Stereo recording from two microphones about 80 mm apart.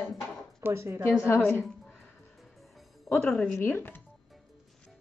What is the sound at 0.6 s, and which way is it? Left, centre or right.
Speech, right.